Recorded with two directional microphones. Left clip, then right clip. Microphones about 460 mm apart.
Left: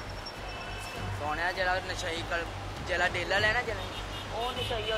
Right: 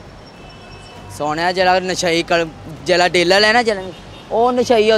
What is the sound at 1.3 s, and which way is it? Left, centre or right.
Speech, right.